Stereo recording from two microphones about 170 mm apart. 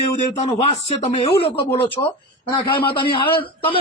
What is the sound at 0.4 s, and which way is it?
A man's voice, 35° left (ahead or behind).